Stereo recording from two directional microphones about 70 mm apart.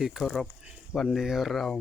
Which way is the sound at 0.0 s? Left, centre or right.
Centre.